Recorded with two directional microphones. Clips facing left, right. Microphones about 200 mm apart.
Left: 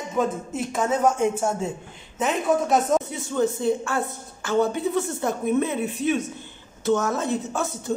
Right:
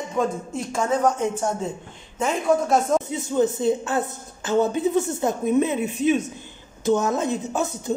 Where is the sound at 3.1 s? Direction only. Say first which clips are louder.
Right 2 dB; 20° right (ahead or behind).